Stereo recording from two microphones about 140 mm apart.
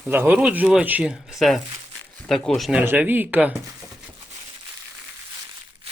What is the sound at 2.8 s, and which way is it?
Speech, 15° right (ahead or behind).